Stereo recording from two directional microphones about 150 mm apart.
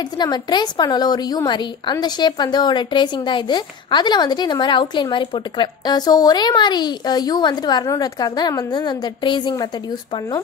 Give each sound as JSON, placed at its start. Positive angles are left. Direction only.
{"t": 0.0, "sound": "a woman's voice", "side_deg": 30}